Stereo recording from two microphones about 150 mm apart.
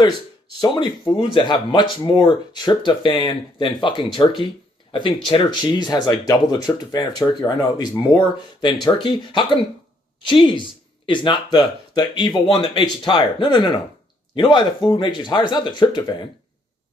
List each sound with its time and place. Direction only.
0.6 s speech: 30° left (ahead or behind)